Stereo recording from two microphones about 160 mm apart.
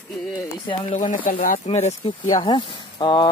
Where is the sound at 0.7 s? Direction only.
30° left (ahead or behind).